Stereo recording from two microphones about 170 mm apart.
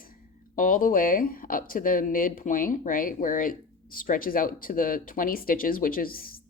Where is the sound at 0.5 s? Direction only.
55° left (ahead or behind).